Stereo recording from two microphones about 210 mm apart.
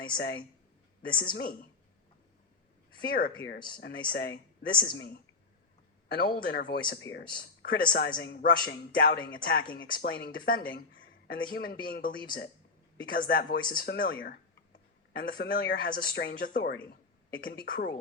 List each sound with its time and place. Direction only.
0.0 s a woman's voice: 45° left (ahead or behind)
3.0 s speech: 45° left (ahead or behind)